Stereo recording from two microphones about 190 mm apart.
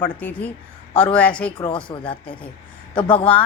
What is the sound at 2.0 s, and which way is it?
Speech, 25° left (ahead or behind).